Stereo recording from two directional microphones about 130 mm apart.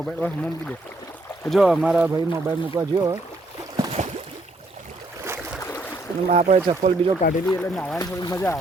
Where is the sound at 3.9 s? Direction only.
60° right (ahead or behind).